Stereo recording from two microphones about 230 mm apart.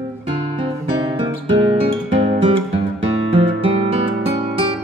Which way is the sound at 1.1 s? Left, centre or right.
Right.